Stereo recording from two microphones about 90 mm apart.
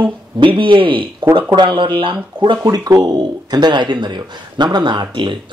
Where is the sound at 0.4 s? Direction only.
65° right (ahead or behind).